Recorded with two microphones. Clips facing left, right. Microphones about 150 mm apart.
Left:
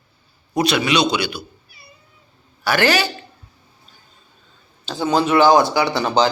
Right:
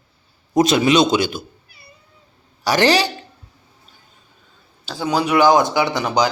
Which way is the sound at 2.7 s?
30° right (ahead or behind).